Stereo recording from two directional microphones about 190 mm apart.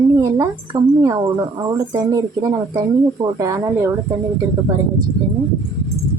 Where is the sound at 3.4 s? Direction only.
20° right (ahead or behind).